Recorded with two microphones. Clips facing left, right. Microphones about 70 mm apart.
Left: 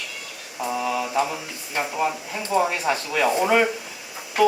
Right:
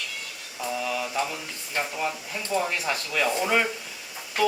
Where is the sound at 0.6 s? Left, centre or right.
Centre.